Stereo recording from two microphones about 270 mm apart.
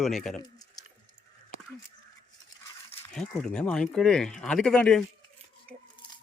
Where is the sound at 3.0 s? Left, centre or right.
Centre.